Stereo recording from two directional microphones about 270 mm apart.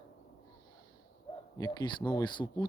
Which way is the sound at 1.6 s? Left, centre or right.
Centre.